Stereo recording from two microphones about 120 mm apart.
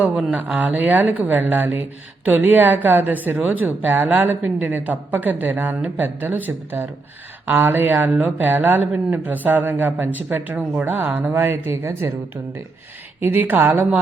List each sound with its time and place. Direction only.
0.0 s speech: 10° right (ahead or behind)
13.1 s speech: 20° right (ahead or behind)